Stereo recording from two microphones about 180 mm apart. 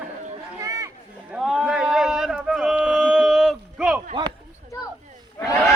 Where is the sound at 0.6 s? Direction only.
20° right (ahead or behind).